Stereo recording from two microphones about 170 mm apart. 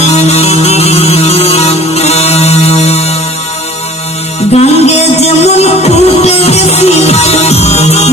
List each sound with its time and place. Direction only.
0.0 s music: 40° left (ahead or behind)
4.5 s music: 40° left (ahead or behind)